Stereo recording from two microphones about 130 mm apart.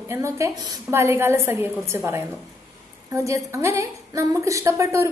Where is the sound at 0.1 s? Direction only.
20° right (ahead or behind).